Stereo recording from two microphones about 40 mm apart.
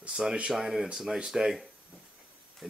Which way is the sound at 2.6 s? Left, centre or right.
Centre.